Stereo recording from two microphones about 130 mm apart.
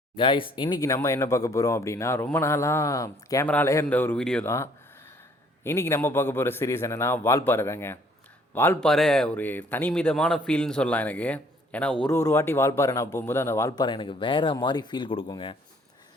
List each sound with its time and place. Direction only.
0.2 s speech: 40° left (ahead or behind); by 3.4 s 25° left (ahead or behind)
3.4 s a man's voice: 10° left (ahead or behind)
4.4 s a sound: 20° left (ahead or behind)
5.6 s a man's voice: 20° left (ahead or behind)
8.8 s a man's voice: 5° left (ahead or behind)
12.1 s speech: 20° left (ahead or behind); by 15.3 s 40° left (ahead or behind)